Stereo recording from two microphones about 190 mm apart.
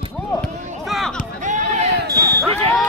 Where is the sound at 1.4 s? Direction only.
40° right (ahead or behind).